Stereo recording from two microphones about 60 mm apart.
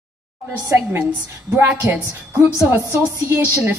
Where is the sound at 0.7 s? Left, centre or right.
Right.